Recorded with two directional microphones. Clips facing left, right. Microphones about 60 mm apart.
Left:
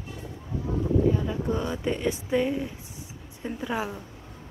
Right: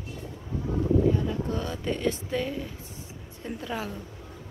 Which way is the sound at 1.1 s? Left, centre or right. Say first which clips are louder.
Even; centre.